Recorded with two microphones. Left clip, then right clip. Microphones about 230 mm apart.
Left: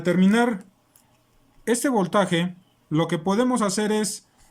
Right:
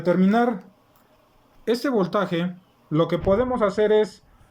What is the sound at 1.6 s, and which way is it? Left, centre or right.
Speech, left.